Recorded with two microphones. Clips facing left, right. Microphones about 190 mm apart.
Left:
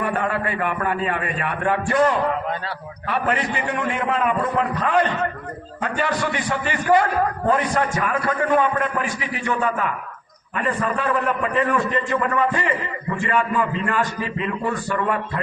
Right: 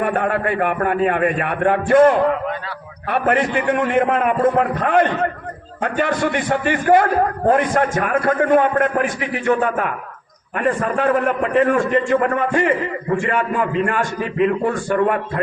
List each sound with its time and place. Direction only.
0.0 s a man's voice: 55° right (ahead or behind)